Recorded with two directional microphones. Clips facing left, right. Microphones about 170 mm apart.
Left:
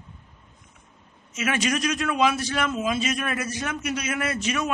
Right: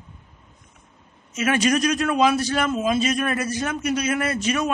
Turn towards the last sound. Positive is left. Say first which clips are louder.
# right 3 dB
turn(degrees=-35)  # may be behind; listen again after turning